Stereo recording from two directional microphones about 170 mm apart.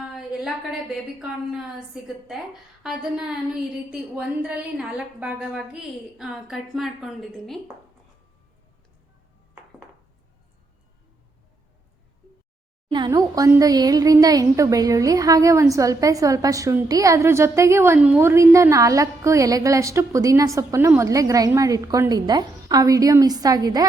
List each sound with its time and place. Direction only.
0.1 s a sound: 5° right (ahead or behind)
2.0 s a woman's voice: centre (ahead or behind)
12.9 s a woman's voice: 25° right (ahead or behind)